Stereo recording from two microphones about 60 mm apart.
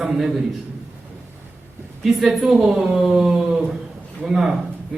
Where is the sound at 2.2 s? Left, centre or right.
Centre.